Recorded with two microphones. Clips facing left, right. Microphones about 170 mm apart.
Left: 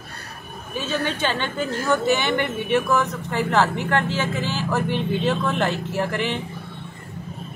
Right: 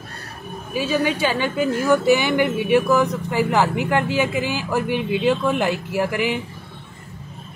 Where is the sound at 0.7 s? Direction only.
10° right (ahead or behind).